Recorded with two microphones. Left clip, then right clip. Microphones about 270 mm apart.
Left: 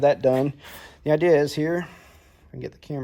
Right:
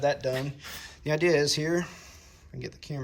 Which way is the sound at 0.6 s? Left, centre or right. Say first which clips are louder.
Left 6 dB; centre.